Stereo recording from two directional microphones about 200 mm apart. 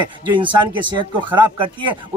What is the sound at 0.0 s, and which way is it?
Speech, 25° right (ahead or behind).